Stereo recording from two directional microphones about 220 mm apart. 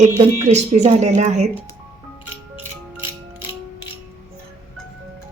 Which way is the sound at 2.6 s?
10° right (ahead or behind).